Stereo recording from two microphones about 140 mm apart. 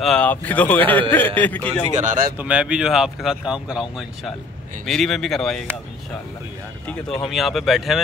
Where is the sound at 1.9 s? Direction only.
65° right (ahead or behind).